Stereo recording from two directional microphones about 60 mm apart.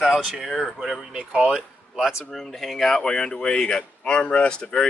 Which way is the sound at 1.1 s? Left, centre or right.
Centre.